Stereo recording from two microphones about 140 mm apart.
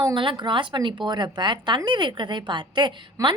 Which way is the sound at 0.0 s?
35° right (ahead or behind).